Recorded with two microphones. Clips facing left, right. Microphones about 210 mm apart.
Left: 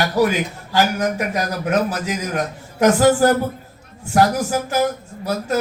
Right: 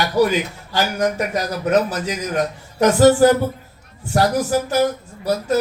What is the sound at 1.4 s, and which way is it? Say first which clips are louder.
Speech: right 3 dB; 45° left (ahead or behind).